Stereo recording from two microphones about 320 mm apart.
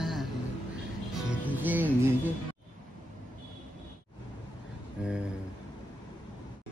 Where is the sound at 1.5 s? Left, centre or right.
Centre.